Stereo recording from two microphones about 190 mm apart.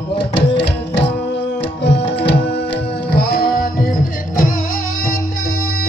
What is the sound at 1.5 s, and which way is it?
Tabla, 65° left (ahead or behind).